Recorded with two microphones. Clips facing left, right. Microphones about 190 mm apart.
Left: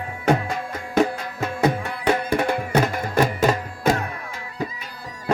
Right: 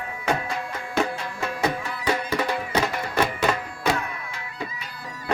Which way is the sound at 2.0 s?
50° left (ahead or behind).